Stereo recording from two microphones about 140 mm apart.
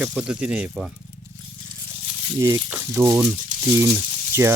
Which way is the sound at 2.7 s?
15° right (ahead or behind).